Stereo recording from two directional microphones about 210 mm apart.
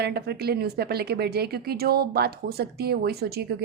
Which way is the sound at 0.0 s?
50° right (ahead or behind).